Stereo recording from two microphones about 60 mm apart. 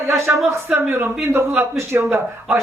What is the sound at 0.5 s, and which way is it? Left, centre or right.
Speech, right.